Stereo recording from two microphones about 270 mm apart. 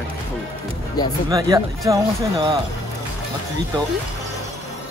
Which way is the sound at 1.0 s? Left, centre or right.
Centre.